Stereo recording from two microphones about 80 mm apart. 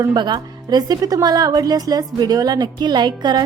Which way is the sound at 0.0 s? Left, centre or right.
Right.